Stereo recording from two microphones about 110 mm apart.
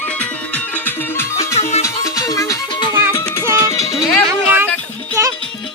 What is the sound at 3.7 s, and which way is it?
Music, 30° left (ahead or behind).